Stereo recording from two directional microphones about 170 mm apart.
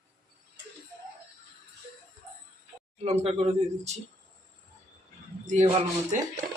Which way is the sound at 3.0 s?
40° right (ahead or behind).